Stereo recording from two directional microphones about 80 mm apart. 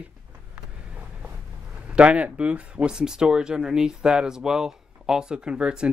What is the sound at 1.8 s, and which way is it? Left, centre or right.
Speech, centre.